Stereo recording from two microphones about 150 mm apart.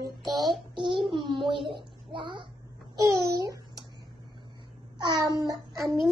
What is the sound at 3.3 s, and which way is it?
Babbling, 25° right (ahead or behind).